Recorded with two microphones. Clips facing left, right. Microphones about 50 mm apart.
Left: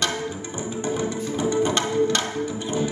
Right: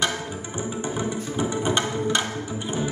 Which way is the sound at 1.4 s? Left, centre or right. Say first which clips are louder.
Left 2 dB; centre.